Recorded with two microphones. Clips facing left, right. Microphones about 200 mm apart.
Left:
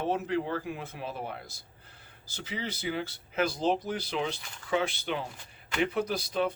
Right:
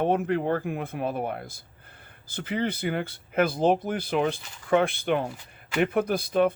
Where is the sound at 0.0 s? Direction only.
55° right (ahead or behind).